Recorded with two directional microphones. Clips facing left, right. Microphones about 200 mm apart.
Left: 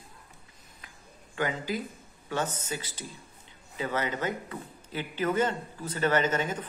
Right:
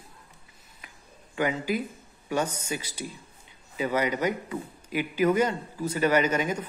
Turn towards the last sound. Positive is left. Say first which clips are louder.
# right 3 dB
turn(degrees=-10)  # may be behind; listen again after turning